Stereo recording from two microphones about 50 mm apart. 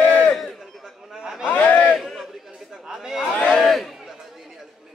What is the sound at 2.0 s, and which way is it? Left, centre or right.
Chatter, centre.